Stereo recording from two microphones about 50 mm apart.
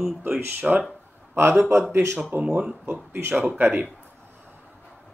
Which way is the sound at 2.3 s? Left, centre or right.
Right.